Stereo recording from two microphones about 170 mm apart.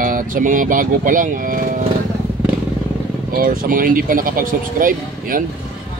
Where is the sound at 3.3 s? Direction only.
60° right (ahead or behind).